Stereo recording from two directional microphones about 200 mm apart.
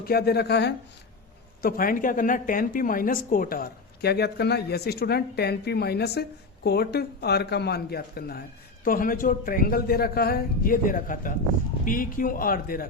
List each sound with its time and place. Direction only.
0.0 s speech: 50° left (ahead or behind)
1.6 s speech: 45° left (ahead or behind)